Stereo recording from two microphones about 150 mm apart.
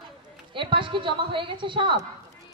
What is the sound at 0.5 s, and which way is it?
A woman's voice, 35° right (ahead or behind).